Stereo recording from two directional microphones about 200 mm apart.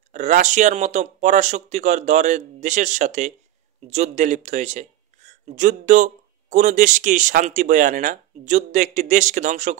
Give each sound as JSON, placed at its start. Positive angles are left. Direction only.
{"t": 0.1, "sound": "speech", "side_deg": -40}